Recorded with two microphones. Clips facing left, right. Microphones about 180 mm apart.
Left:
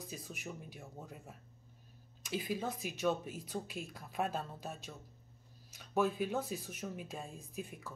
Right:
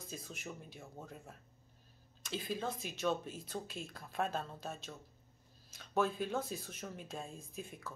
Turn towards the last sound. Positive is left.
turn(degrees=10)  # may be behind; listen again after turning